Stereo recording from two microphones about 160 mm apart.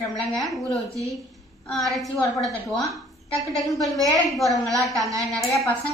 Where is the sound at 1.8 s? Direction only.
Centre (ahead or behind).